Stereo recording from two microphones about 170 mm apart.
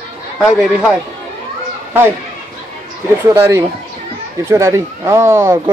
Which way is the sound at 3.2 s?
15° right (ahead or behind).